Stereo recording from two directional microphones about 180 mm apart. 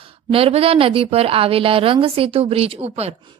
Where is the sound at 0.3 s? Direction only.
30° right (ahead or behind).